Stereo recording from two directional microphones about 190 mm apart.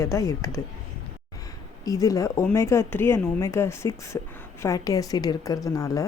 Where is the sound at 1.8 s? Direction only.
20° left (ahead or behind).